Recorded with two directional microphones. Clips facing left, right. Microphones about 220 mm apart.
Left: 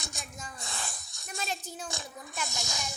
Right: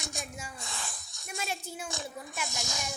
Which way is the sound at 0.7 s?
40° left (ahead or behind).